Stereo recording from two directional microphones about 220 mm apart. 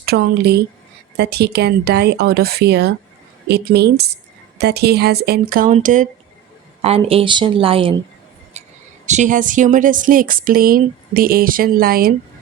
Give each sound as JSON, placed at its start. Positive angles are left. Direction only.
{"t": 0.0, "sound": "a woman's voice", "side_deg": -45}
{"t": 9.0, "sound": "speech", "side_deg": -35}